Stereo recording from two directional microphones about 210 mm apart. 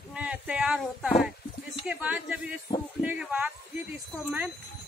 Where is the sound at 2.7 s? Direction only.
20° left (ahead or behind).